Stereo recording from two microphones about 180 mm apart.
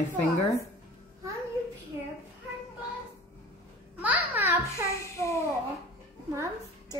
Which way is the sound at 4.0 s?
10° right (ahead or behind).